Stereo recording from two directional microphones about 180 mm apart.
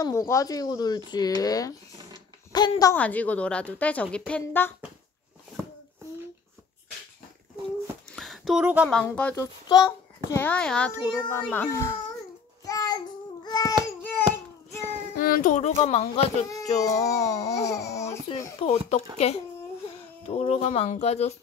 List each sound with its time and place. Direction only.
0.0 s speech: 15° left (ahead or behind)
3.0 s speech: 10° left (ahead or behind)
8.1 s a sound: centre (ahead or behind)
9.0 s speech: 10° left (ahead or behind)
9.3 s a child's voice: 20° left (ahead or behind)
10.4 s speech: 5° left (ahead or behind)
12.6 s child singing: 20° left (ahead or behind)
15.1 s a child's voice: 50° left (ahead or behind); by 16.4 s 35° left (ahead or behind)
16.8 s speech: 20° left (ahead or behind)
18.6 s a child's voice: 35° left (ahead or behind)